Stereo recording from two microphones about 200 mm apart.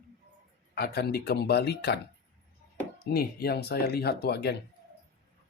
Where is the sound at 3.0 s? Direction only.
50° left (ahead or behind).